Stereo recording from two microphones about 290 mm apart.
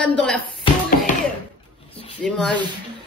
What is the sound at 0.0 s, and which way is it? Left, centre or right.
Speech, centre.